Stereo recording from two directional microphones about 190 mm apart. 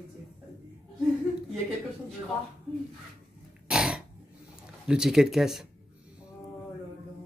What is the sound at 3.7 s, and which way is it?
Throat clearing, 5° right (ahead or behind).